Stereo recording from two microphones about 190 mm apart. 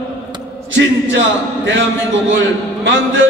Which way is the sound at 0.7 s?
80° right.